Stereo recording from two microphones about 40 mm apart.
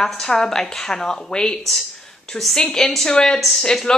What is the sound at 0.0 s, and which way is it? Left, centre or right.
Speech, centre.